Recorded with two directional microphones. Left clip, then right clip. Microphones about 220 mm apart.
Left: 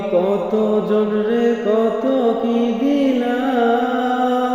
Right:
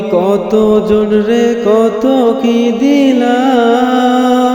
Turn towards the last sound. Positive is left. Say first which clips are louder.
# right 8 dB
turn(degrees=-25)  # may be behind; listen again after turning